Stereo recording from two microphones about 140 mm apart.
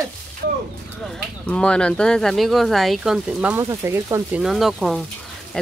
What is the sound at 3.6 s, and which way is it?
Speech, 20° right (ahead or behind).